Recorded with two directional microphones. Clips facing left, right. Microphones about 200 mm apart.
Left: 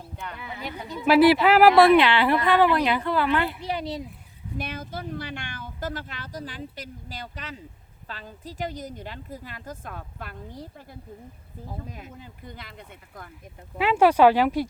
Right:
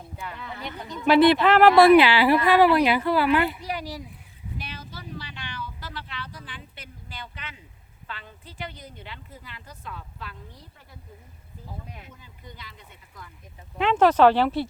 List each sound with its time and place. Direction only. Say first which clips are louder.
0.3 s speech: left 2 dB; 10° left (ahead or behind)
3.7 s speech: left 3 dB; 25° left (ahead or behind)
4.5 s speech: left 7 dB; 50° left (ahead or behind)
11.9 s speech: left 4 dB; 45° left (ahead or behind)
13.7 s speech: even; 10° left (ahead or behind)